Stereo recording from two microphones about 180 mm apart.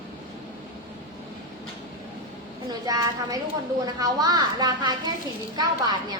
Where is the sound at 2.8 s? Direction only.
20° right (ahead or behind).